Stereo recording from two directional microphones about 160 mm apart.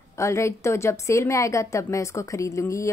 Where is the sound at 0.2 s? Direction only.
20° left (ahead or behind).